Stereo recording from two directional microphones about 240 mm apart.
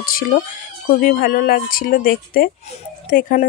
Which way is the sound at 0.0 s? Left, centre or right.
Left.